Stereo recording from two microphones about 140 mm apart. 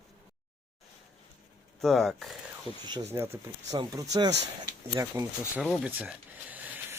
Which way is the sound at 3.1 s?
20° right (ahead or behind).